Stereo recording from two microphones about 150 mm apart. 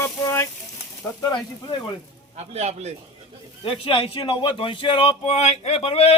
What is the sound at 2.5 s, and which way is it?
Speech, 45° right (ahead or behind).